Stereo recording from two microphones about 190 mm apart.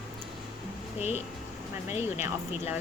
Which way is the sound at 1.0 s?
35° left (ahead or behind).